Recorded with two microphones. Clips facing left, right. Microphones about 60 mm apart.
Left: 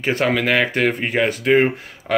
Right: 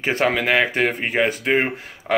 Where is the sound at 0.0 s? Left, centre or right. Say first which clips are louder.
Left 1 dB; right.